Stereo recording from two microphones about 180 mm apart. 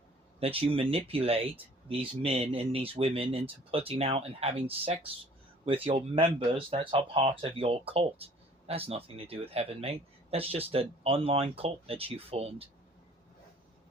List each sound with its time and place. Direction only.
0.3 s speech: 30° right (ahead or behind)